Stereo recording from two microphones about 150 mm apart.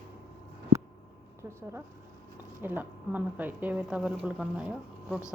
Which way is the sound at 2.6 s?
10° right (ahead or behind).